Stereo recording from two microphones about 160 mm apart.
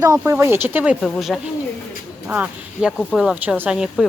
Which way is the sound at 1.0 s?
Centre (ahead or behind).